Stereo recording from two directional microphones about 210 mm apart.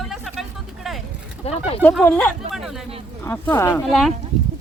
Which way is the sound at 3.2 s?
10° left (ahead or behind).